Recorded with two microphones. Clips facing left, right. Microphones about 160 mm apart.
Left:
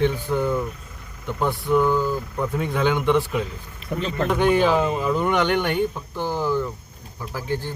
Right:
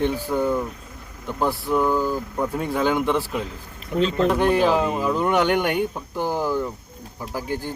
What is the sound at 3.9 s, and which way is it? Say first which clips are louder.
Speech: right 6 dB; 75° left (ahead or behind).